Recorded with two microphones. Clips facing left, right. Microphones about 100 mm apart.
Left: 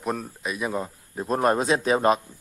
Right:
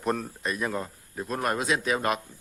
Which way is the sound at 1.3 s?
30° left (ahead or behind).